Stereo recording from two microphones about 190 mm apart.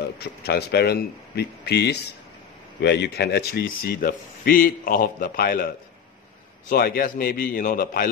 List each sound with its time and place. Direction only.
0.2 s speech: 60° left (ahead or behind)
6.7 s speech: 50° left (ahead or behind)